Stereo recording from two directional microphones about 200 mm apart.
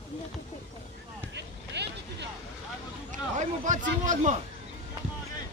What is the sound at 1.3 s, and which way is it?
Vehicle, 60° right (ahead or behind).